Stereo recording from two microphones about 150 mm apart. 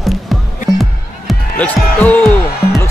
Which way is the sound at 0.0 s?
Centre (ahead or behind).